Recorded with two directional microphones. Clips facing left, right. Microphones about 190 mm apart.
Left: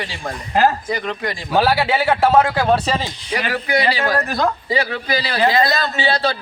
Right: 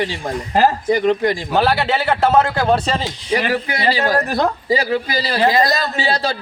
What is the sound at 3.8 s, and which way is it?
Speech, 40° right (ahead or behind).